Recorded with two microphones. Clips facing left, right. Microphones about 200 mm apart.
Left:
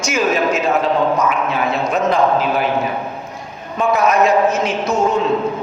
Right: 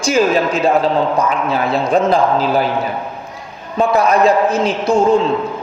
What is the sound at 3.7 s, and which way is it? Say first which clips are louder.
A man's voice: right 2 dB; 35° right (ahead or behind).